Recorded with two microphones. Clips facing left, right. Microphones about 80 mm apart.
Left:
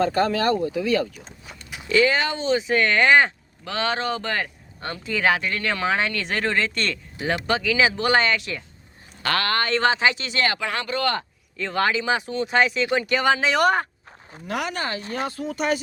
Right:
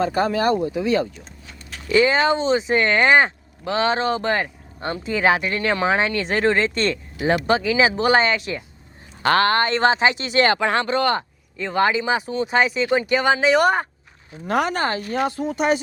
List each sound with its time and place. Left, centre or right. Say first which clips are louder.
0.0 s speech: right 1 dB; centre
13.1 s speech: right 3 dB; centre
14.4 s speech: right 6 dB; right
15.3 s speech: right 2 dB; right